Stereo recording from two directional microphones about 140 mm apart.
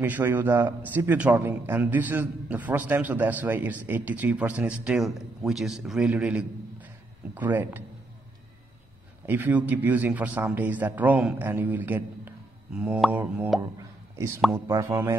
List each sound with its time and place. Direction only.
0.0 s a man's voice: 10° right (ahead or behind)
9.2 s a man's voice: 15° right (ahead or behind)